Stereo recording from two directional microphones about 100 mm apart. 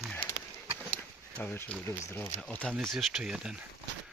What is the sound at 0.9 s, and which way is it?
Speech, 15° left (ahead or behind).